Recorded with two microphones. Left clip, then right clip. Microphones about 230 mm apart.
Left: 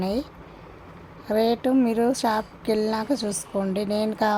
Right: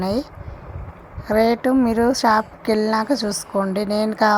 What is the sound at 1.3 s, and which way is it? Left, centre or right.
Speech, centre.